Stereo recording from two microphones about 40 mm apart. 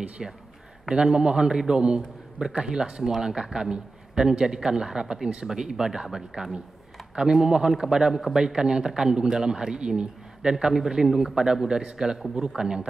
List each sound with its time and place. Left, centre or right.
0.2 s speech: centre
0.8 s a man's voice: right
10.5 s a man's voice: centre